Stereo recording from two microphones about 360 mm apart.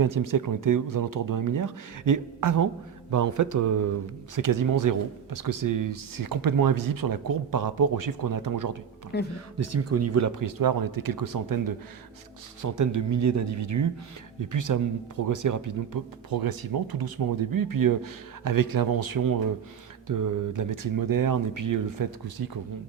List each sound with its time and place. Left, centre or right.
0.0 s speech: right
9.3 s speech: right
12.6 s speech: right